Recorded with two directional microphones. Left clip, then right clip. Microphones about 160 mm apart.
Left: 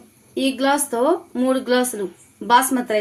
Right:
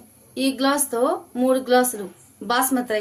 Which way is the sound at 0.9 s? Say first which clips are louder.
Left 3 dB; 35° left (ahead or behind).